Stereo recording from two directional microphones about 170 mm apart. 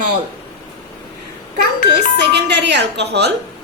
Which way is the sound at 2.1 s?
85° right.